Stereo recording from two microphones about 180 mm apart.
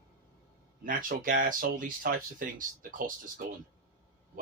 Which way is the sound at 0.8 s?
50° right (ahead or behind).